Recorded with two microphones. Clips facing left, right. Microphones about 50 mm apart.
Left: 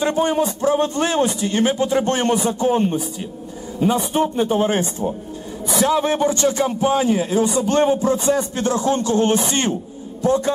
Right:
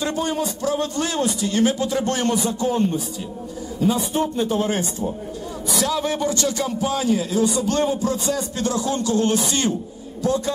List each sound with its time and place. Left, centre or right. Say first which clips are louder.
0.0 s a man's voice: left 5 dB; left